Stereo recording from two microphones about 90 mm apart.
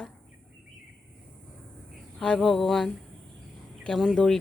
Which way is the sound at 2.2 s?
10° left (ahead or behind).